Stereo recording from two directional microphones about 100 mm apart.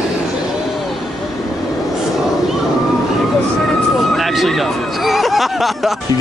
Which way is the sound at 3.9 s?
Centre (ahead or behind).